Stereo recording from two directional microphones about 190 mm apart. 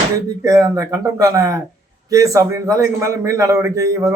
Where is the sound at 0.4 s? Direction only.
20° right (ahead or behind).